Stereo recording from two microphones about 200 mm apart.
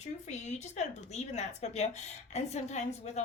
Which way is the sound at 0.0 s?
35° left (ahead or behind).